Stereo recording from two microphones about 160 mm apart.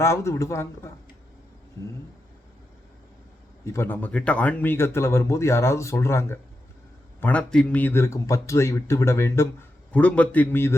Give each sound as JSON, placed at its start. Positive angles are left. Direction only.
{"t": 0.0, "sound": "a man's voice", "side_deg": 15}
{"t": 1.8, "sound": "a sound", "side_deg": 20}
{"t": 3.6, "sound": "a man's voice", "side_deg": 15}